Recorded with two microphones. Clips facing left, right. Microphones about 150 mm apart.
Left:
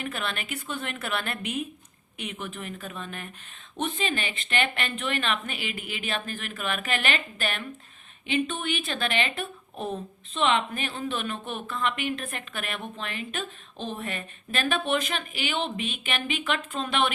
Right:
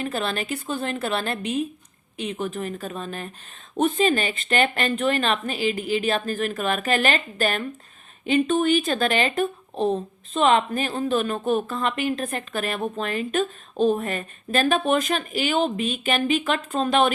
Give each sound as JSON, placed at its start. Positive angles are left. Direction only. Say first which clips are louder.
{"t": 0.0, "sound": "speech", "louder": "right 6 dB", "side_deg": -35}